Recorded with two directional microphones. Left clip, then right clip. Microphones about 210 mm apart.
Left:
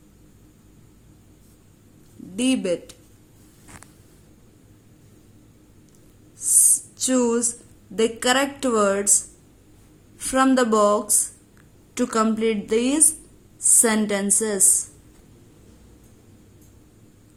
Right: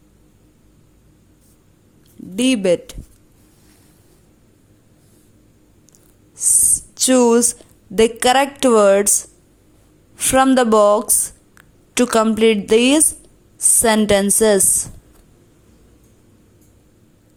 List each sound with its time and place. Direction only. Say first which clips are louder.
2.3 s a woman's voice: right 7 dB; 35° right (ahead or behind)
6.3 s writing: right 3 dB; 30° right (ahead or behind)
7.9 s a woman's voice: right 7 dB; 35° right (ahead or behind)